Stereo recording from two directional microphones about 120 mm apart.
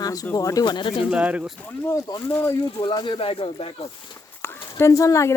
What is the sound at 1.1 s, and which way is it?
Speech, 10° right (ahead or behind).